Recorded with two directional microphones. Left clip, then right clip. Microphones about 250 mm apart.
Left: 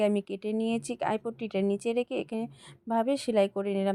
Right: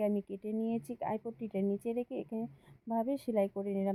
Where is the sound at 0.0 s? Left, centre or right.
Left.